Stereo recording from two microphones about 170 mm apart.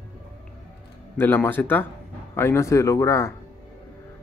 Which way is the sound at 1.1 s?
10° left (ahead or behind).